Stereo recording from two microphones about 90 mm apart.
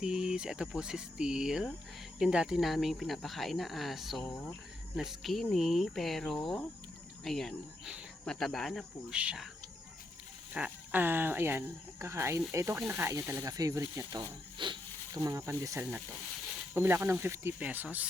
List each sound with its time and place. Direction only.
0.0 s speech: 10° right (ahead or behind)
9.1 s speech: 10° right (ahead or behind)
10.5 s speech: 20° right (ahead or behind); by 14.3 s 40° right (ahead or behind)
14.6 s speech: 65° right (ahead or behind)
15.1 s speech: 40° right (ahead or behind); by 17.8 s 20° right (ahead or behind)